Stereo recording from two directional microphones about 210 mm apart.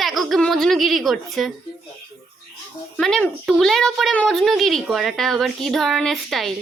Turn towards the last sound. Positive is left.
turn(degrees=0)  # may be behind; listen again after turning